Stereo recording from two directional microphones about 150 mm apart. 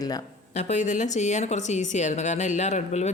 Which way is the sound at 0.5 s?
55° left (ahead or behind).